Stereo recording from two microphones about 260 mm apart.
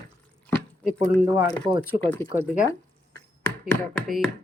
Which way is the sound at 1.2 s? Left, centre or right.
Centre.